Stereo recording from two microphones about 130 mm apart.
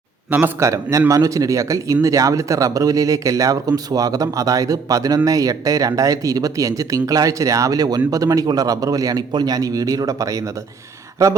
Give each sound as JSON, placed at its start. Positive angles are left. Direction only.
{"t": 0.3, "sound": "speech", "side_deg": -15}